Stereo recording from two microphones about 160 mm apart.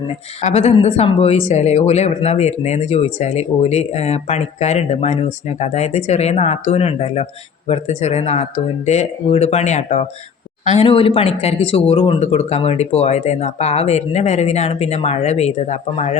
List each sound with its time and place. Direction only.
0.4 s speech: 40° left (ahead or behind)